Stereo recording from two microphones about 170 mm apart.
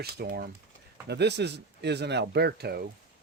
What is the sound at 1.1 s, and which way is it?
Speech, 80° right.